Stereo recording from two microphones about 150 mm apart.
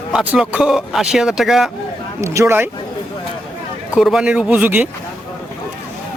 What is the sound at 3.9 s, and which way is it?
Speech, 5° right (ahead or behind).